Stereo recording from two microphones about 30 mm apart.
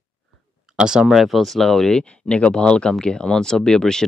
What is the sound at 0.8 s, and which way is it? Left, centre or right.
Speech, right.